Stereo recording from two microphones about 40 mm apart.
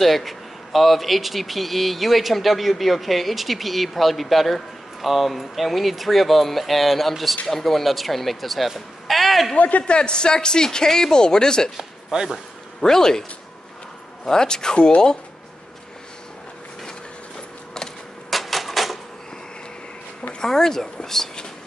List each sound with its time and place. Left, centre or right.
0.0 s speech: centre
9.6 s a man's voice: left
9.9 s speech: left
11.7 s speech: centre
12.8 s speech: centre
14.2 s speech: centre
18.3 s typewriter: centre
20.3 s speech: centre